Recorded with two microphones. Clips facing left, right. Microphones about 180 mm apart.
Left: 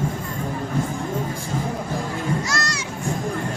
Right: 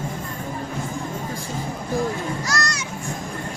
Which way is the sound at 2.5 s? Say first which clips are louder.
Right 1 dB; 25° left (ahead or behind).